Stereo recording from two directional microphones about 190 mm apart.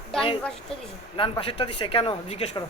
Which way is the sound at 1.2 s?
30° left (ahead or behind).